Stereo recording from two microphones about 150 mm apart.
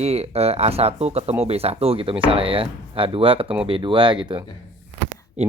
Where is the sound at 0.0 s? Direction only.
45° right (ahead or behind).